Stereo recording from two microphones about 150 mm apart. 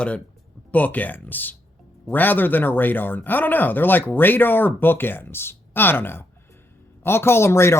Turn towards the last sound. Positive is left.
turn(degrees=15)  # may be behind; listen again after turning